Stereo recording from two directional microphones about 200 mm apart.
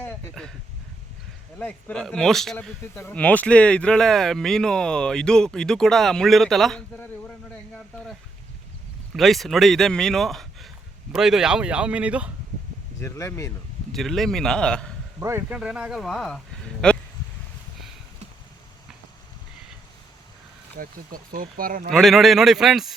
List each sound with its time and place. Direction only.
0.0 s a sound: 5° left (ahead or behind)
1.5 s speech: 5° left (ahead or behind)
9.1 s speech: centre (ahead or behind)
13.0 s speech: 15° left (ahead or behind)
13.9 s speech: centre (ahead or behind)
15.2 s speech: 15° right (ahead or behind); by 17.0 s 5° left (ahead or behind)
20.7 s speech: 45° right (ahead or behind)
21.9 s speech: centre (ahead or behind)